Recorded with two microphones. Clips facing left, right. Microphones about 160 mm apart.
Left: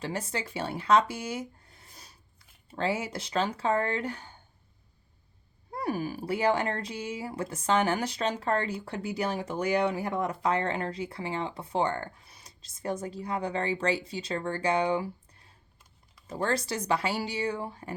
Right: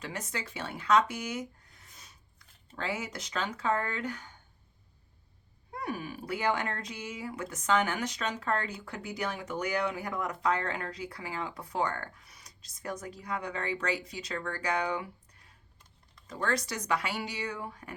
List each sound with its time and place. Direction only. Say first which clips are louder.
0.0 s speech: left 5 dB; 30° left (ahead or behind)
5.7 s speech: left 5 dB; 35° left (ahead or behind)